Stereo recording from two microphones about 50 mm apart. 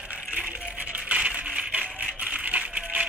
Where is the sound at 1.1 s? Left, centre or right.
Right.